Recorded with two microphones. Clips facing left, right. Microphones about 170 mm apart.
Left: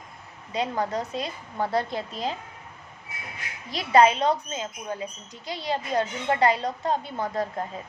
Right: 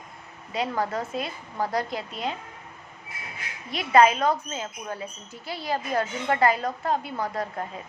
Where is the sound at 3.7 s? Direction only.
30° left (ahead or behind).